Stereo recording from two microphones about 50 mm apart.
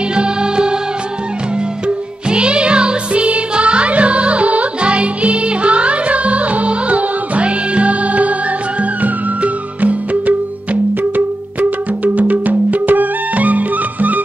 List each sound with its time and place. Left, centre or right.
0.1 s music: centre
2.2 s music: right